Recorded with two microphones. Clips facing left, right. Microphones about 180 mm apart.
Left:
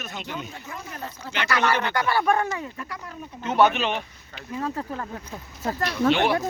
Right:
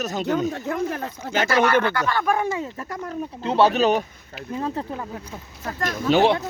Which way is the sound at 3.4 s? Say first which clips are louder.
Right 3 dB; 30° right (ahead or behind).